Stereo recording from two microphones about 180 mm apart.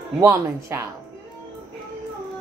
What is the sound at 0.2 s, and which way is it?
Speech, 15° right (ahead or behind).